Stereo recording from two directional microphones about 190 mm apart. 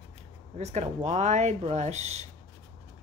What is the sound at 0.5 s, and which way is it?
Speech, 35° right (ahead or behind).